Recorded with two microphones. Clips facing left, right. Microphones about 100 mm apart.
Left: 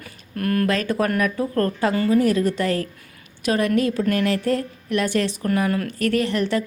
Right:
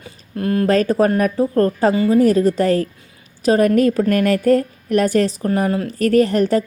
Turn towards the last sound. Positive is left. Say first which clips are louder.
# right 7 dB
turn(degrees=-40)  # may be behind; listen again after turning